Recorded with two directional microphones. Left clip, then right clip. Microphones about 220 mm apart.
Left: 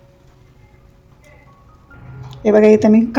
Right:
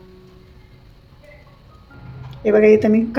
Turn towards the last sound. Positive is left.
turn(degrees=20)  # may be behind; listen again after turning